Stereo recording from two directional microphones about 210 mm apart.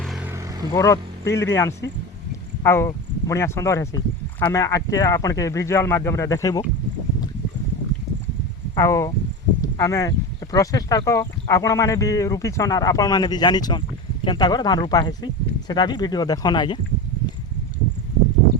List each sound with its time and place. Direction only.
0.0 s vehicle: centre (ahead or behind)
0.3 s vehicle: 15° right (ahead or behind)
0.7 s speech: 15° left (ahead or behind)
8.7 s speech: 15° left (ahead or behind)